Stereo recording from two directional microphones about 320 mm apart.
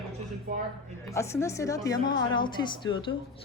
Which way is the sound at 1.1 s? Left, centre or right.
Centre.